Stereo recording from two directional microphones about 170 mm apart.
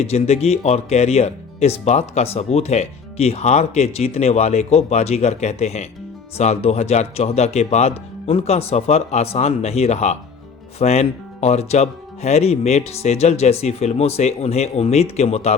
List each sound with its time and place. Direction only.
0.0 s speech: 40° left (ahead or behind)